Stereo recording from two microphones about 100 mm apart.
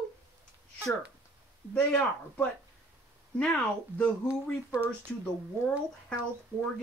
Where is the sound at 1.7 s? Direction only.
15° left (ahead or behind).